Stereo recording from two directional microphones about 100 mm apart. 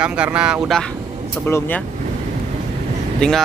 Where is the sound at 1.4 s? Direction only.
20° left (ahead or behind).